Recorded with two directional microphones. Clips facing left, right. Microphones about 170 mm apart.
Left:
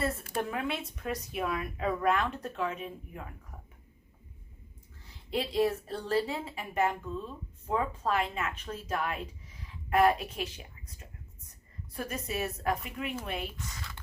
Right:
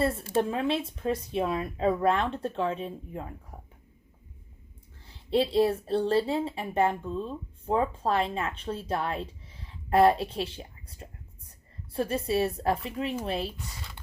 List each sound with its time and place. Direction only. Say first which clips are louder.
0.0 s a woman's voice: right 6 dB; 30° right (ahead or behind)
5.0 s a woman's voice: right 8 dB; 30° right (ahead or behind)
13.6 s speech: even; 15° right (ahead or behind)